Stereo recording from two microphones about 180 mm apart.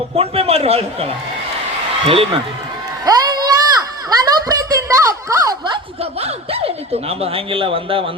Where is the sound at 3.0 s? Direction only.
20° right (ahead or behind).